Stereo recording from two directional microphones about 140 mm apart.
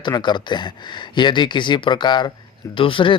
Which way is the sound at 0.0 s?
30° left (ahead or behind).